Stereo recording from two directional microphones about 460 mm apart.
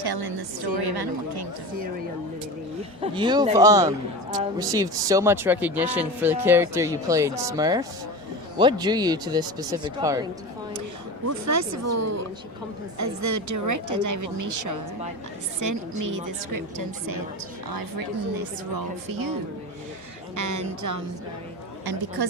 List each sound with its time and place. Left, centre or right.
0.0 s speech: right
3.0 s speech: centre
11.3 s a woman's voice: right
22.2 s speech: right